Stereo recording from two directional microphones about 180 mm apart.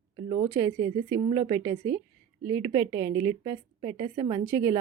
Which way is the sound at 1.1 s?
20° right (ahead or behind).